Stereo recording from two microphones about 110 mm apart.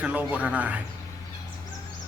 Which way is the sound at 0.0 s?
15° right (ahead or behind).